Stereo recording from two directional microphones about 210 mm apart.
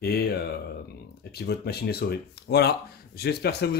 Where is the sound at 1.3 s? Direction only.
50° left (ahead or behind).